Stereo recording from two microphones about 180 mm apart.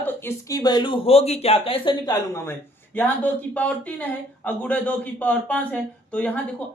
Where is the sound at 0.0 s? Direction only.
15° left (ahead or behind).